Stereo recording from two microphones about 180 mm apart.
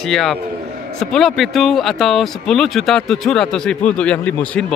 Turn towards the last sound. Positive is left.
turn(degrees=5)  # may be behind; listen again after turning